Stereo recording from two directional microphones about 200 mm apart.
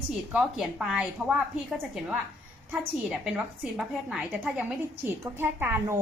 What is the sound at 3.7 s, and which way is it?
A woman's voice, centre (ahead or behind).